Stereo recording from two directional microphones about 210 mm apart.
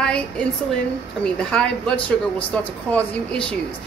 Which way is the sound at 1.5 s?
5° left (ahead or behind).